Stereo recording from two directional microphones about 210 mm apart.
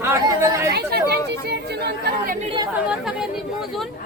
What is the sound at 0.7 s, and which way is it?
Speech, 50° right (ahead or behind).